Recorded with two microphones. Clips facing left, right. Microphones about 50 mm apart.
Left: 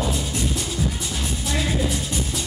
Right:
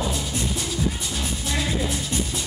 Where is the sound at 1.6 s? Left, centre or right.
Centre.